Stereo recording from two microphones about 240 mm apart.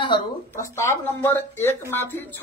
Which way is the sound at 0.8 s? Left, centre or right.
Centre.